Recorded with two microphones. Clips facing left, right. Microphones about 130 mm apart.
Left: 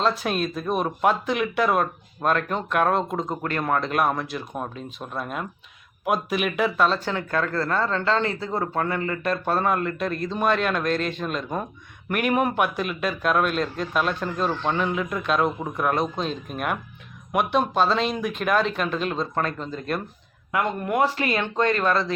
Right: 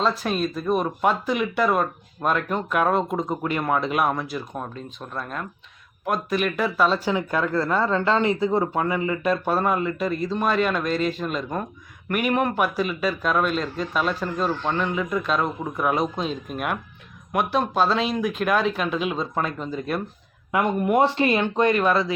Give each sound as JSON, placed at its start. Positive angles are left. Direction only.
{"t": 0.0, "sound": "speech", "side_deg": 0}
{"t": 6.7, "sound": "speech", "side_deg": -5}